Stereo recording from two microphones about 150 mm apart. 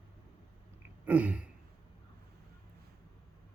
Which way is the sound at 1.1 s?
10° right (ahead or behind).